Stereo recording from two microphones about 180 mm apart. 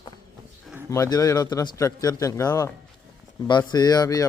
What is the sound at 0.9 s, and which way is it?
Speech, 20° left (ahead or behind).